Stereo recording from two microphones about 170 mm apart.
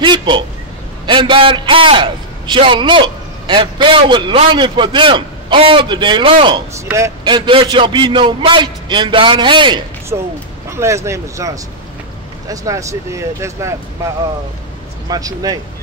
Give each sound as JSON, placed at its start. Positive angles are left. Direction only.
{"t": 0.0, "sound": "a sound", "side_deg": -25}
{"t": 1.0, "sound": "a man's voice", "side_deg": -30}
{"t": 10.7, "sound": "a man's voice", "side_deg": -15}